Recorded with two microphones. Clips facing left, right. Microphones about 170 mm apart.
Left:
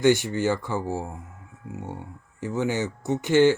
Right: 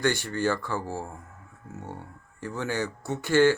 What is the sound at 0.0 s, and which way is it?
Speech, 20° left (ahead or behind).